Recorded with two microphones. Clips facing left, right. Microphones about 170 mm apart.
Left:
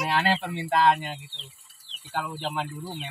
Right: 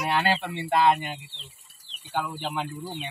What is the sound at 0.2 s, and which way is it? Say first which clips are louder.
Speech: even; centre (ahead or behind).